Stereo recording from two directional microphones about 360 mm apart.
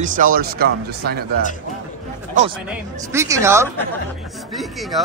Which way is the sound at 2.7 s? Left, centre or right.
Centre.